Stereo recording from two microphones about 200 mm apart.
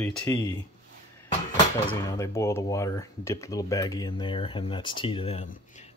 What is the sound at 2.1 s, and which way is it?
Speech, 15° left (ahead or behind).